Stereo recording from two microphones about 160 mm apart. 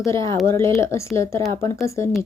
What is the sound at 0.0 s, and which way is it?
Speech, 20° left (ahead or behind).